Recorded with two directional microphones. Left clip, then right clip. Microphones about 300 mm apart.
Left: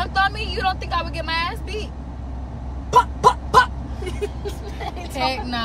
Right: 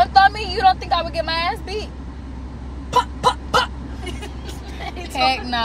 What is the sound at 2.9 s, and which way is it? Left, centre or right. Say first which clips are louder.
Fowl: left 3 dB; left.